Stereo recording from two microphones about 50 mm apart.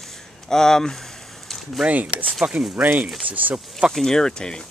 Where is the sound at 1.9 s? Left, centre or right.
Right.